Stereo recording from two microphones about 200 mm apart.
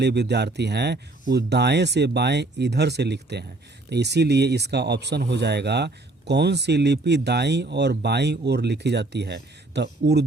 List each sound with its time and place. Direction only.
0.0 s speech: 55° right (ahead or behind)